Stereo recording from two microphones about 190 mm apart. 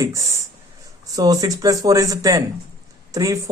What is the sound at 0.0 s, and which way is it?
Speech, 15° right (ahead or behind).